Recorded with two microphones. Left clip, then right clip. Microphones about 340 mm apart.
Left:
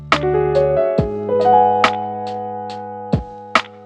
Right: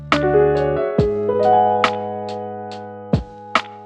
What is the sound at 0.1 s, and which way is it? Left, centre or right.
Music, centre.